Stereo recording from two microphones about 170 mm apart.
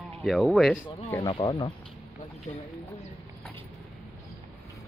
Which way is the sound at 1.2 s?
25° left (ahead or behind).